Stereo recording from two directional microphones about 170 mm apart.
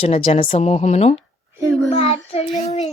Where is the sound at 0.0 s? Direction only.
35° left (ahead or behind).